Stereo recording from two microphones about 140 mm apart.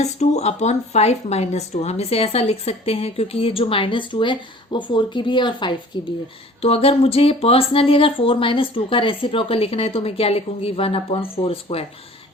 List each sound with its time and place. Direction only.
0.0 s a woman's voice: 50° left (ahead or behind); by 5.7 s 35° left (ahead or behind)
6.6 s a woman's voice: 45° left (ahead or behind)